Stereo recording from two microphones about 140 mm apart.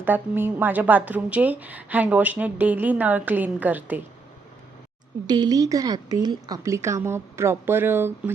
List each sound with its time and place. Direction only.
0.0 s a woman's voice: 15° right (ahead or behind)
5.2 s a woman's voice: 30° right (ahead or behind)